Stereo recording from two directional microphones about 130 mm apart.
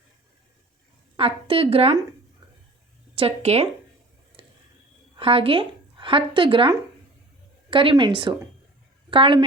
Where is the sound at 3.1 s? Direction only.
50° right (ahead or behind).